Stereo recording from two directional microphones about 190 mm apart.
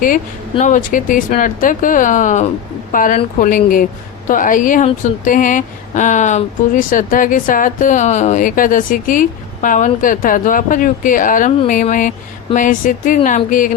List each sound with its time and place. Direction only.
0.5 s speech: 40° left (ahead or behind)